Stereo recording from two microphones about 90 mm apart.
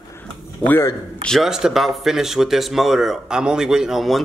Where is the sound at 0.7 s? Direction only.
25° left (ahead or behind).